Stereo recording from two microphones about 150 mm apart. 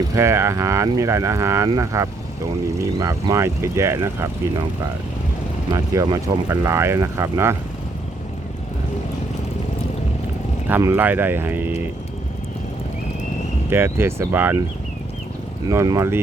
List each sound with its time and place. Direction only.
0.2 s speech: 20° right (ahead or behind)
5.7 s speech: 25° right (ahead or behind)
10.7 s speech: 15° right (ahead or behind)
13.7 s speech: 15° right (ahead or behind)
15.6 s speech: 25° right (ahead or behind)